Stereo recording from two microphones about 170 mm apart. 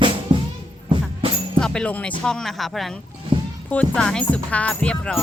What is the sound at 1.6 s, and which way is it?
Speech, 5° left (ahead or behind).